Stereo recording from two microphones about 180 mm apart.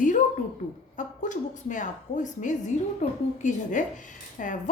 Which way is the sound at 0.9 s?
45° left (ahead or behind).